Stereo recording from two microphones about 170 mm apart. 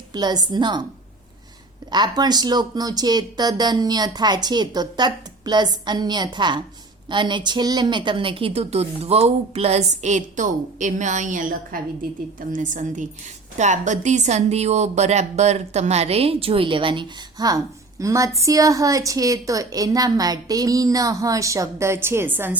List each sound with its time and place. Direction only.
0.1 s speech: 25° right (ahead or behind)
1.9 s a woman's voice: 25° right (ahead or behind)